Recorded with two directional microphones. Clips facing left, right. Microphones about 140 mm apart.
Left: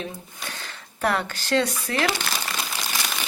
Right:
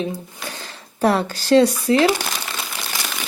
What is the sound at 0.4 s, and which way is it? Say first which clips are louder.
Speech: right 4 dB; 30° right (ahead or behind).